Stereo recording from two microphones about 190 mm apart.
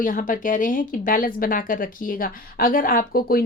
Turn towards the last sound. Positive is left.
turn(degrees=50)  # may be behind; listen again after turning